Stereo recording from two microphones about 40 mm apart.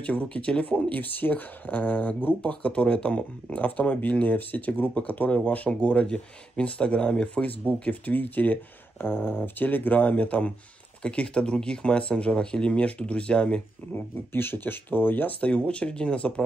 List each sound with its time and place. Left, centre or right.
0.0 s speech: left
2.4 s speech: left
3.6 s speech: left
7.8 s speech: left
8.9 s a sound: left
9.4 s speech: left
13.9 s speech: left
15.4 s speech: left